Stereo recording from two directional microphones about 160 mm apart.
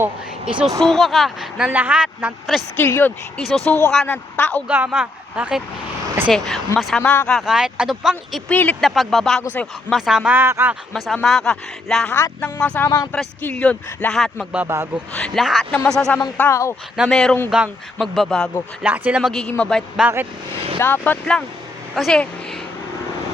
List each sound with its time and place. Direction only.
0.0 s speech: 5° right (ahead or behind)
2.7 s speech: 15° left (ahead or behind)
4.7 s speech: 5° right (ahead or behind)
7.0 s speech: 10° left (ahead or behind)
8.3 s speech: 10° left (ahead or behind)
9.4 s speech: 15° left (ahead or behind)
9.9 s speech: centre (ahead or behind)
10.9 s speech: centre (ahead or behind)
12.1 s speech: 15° left (ahead or behind)
14.5 s speech: 15° right (ahead or behind)
15.1 s speech: 5° left (ahead or behind)
16.4 s speech: 20° left (ahead or behind)
17.0 s speech: 5° left (ahead or behind)